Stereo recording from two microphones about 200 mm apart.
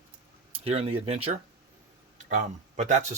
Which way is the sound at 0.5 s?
30° right (ahead or behind).